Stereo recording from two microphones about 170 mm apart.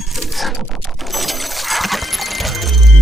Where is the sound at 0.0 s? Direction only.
Centre (ahead or behind).